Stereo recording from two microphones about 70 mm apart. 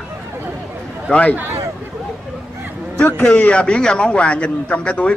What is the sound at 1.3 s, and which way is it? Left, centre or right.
Speech, right.